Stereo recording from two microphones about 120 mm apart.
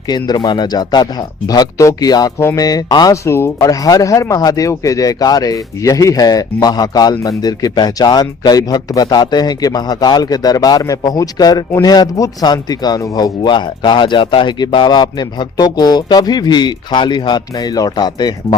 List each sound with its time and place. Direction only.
0.1 s speech: 35° left (ahead or behind)
3.2 s speech: 20° left (ahead or behind)